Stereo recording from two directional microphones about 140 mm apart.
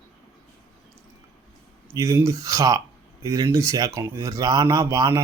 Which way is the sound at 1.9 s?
20° right (ahead or behind).